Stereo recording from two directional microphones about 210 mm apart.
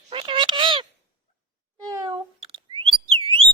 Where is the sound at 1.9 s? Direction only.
20° right (ahead or behind).